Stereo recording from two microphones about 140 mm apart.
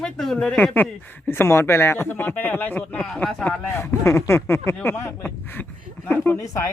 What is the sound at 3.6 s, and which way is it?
Speech, 15° left (ahead or behind).